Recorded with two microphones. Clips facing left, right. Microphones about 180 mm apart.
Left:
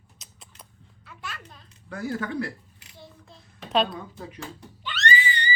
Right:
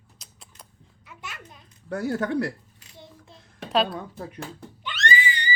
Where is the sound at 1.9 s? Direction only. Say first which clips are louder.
Right 4 dB; 65° right (ahead or behind).